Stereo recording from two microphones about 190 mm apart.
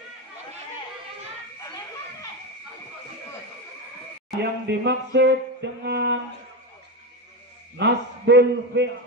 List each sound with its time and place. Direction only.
4.4 s speech: 65° right (ahead or behind)
7.8 s speech: 65° right (ahead or behind)